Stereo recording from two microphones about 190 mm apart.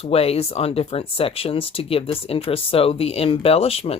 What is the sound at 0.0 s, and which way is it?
Speech, 30° left (ahead or behind).